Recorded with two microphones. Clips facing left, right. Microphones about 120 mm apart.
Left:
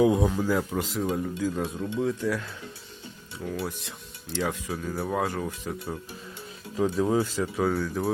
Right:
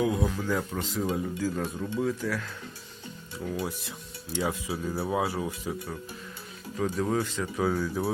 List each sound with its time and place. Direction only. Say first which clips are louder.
0.0 s speech: left 5 dB; 20° left (ahead or behind)
0.5 s speech: left 3 dB; 5° left (ahead or behind)
1.5 s speech: left 2 dB; 20° left (ahead or behind)
3.5 s speech: even; 15° right (ahead or behind)
6.7 s speech: left 4 dB; 15° left (ahead or behind); by 8.1 s 5° right (ahead or behind)